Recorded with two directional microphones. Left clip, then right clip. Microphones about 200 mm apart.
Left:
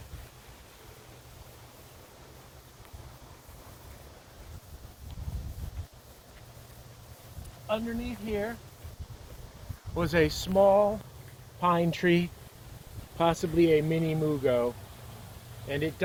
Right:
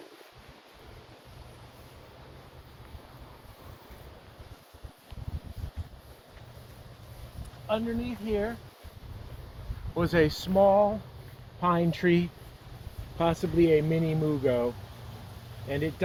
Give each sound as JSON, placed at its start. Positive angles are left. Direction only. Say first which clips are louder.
{"t": 7.7, "sound": "speech", "louder": "right 2 dB", "side_deg": 0}
{"t": 9.9, "sound": "speech", "louder": "right 1 dB", "side_deg": 15}
{"t": 10.5, "sound": "speech", "louder": "even", "side_deg": 40}
{"t": 13.1, "sound": "speech", "louder": "even", "side_deg": 25}
{"t": 15.7, "sound": "speech", "louder": "even", "side_deg": 20}